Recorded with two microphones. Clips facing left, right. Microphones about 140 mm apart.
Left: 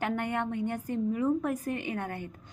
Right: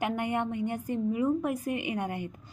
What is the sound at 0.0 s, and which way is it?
A woman's voice, 10° right (ahead or behind).